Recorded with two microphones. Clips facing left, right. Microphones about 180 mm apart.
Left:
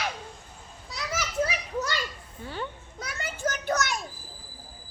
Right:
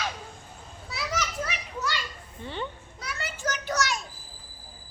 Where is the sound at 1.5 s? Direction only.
40° left (ahead or behind).